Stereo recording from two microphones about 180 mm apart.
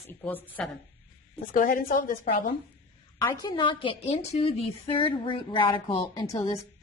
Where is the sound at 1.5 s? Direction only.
50° left (ahead or behind).